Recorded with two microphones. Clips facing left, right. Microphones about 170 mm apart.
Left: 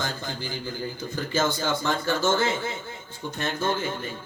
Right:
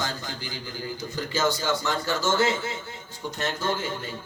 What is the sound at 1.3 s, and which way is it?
A man's voice, 55° left (ahead or behind).